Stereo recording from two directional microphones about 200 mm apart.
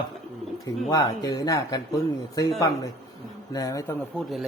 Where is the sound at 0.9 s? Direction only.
20° left (ahead or behind).